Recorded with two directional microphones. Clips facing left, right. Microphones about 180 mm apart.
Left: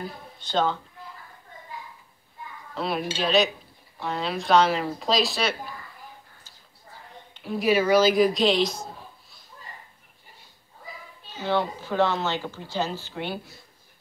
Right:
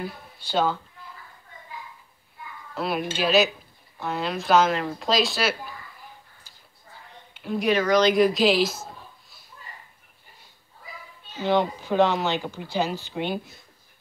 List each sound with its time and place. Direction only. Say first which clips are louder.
0.0 s speech: right 2 dB; 10° right (ahead or behind)
2.7 s a sound: right 1 dB; centre (ahead or behind)
3.2 s speech: right 2 dB; 5° right (ahead or behind)
7.3 s speech: left 1 dB; centre (ahead or behind)
11.4 s speech: right 3 dB; 15° right (ahead or behind)